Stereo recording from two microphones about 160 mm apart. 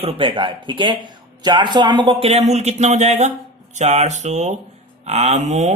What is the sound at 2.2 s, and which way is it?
Speech, 40° right (ahead or behind).